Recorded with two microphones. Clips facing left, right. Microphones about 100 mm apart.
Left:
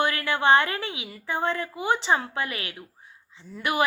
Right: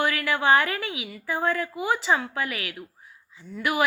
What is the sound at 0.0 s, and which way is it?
A woman's voice, 25° left (ahead or behind).